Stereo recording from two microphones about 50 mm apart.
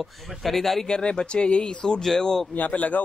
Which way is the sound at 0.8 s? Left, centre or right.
Centre.